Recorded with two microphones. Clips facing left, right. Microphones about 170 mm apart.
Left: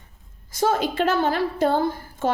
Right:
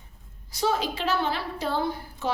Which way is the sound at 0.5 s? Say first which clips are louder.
Left 5 dB; 50° left (ahead or behind).